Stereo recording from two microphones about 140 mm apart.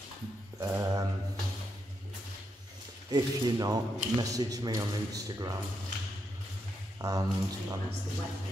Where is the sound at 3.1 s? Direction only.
30° right (ahead or behind).